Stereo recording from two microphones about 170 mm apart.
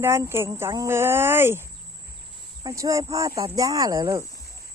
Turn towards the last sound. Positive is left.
turn(degrees=-20)  # may be behind; listen again after turning